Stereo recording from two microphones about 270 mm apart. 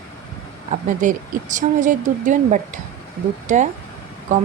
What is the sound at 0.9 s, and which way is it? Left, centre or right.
Speech, right.